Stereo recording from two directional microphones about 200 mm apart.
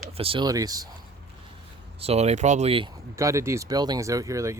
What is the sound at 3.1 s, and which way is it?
Speech, 15° right (ahead or behind).